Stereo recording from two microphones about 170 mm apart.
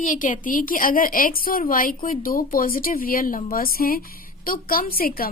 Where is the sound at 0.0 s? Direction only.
50° left (ahead or behind).